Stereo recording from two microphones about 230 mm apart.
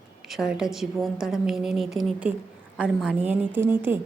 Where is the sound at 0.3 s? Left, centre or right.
Centre.